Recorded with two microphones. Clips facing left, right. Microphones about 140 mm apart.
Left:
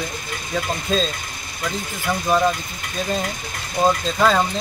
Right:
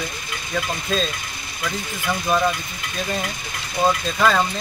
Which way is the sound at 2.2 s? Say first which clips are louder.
Left 2 dB; 15° left (ahead or behind).